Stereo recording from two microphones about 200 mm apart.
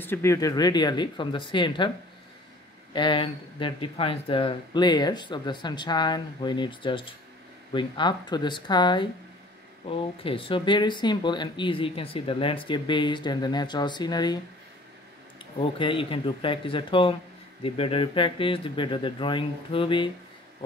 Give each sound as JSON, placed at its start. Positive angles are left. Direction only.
{"t": 0.0, "sound": "speech", "side_deg": 10}
{"t": 2.9, "sound": "speech", "side_deg": 25}
{"t": 15.6, "sound": "speech", "side_deg": 25}